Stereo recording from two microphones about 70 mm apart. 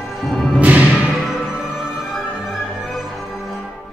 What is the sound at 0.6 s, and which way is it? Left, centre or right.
Music, centre.